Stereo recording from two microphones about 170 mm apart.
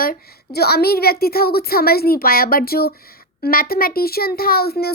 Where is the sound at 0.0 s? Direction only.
60° left (ahead or behind).